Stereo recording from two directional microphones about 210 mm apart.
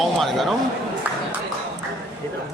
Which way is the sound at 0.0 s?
Centre (ahead or behind).